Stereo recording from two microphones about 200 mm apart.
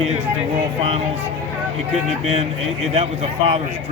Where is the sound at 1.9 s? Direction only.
30° right (ahead or behind).